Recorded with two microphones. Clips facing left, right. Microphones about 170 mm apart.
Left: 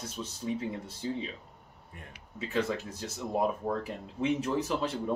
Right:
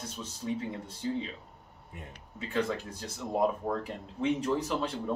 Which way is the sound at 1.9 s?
20° right (ahead or behind).